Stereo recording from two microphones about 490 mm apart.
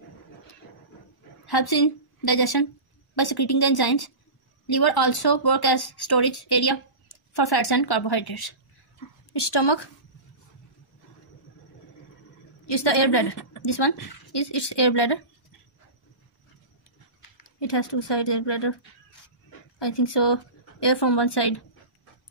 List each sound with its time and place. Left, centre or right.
1.4 s a woman's voice: left
12.6 s a woman's voice: left
17.6 s speech: left
19.8 s speech: left